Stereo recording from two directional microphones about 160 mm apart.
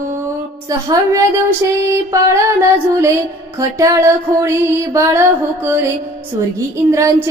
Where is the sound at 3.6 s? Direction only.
20° right (ahead or behind).